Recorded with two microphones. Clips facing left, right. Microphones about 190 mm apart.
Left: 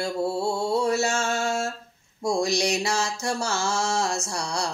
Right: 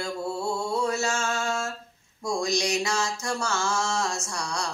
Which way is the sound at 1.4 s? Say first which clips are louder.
Left 3 dB; 30° left (ahead or behind).